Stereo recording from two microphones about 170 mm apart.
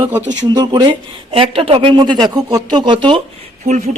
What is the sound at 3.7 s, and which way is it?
Speech, 45° right (ahead or behind).